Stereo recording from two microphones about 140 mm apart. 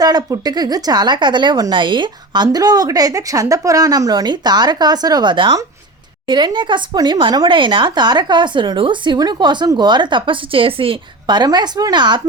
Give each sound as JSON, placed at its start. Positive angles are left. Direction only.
{"t": 0.0, "sound": "a woman's voice", "side_deg": -30}